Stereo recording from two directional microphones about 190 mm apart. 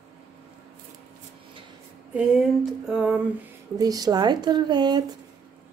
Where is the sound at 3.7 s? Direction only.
20° right (ahead or behind).